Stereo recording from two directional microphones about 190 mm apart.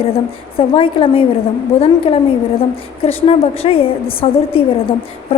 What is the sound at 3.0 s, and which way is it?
A woman's voice, 30° left (ahead or behind).